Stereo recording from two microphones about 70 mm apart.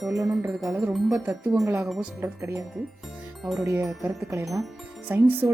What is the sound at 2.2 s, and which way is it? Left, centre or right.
Speech, right.